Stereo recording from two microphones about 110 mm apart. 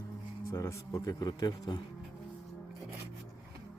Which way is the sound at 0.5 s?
25° left (ahead or behind).